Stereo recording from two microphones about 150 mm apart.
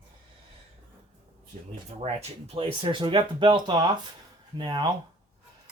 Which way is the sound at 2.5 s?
35° right (ahead or behind).